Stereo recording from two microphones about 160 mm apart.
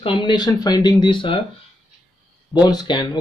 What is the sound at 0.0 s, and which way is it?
Speech, 30° left (ahead or behind).